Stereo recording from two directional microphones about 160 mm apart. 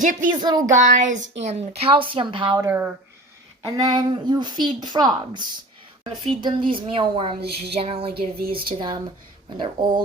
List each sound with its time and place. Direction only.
0.0 s a woman's voice: 55° right (ahead or behind); by 2.6 s 30° right (ahead or behind)
2.6 s speech: 15° right (ahead or behind)
3.6 s a woman's voice: 25° right (ahead or behind)
7.4 s speech: 90° right
7.8 s a woman's voice: 35° right (ahead or behind)
8.1 s speech: 70° right (ahead or behind)
9.6 s speech: 30° right (ahead or behind)